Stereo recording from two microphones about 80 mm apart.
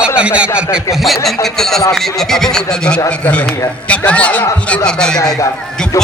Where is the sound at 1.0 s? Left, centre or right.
Centre.